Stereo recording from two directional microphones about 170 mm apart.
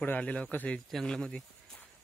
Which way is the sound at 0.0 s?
10° left (ahead or behind).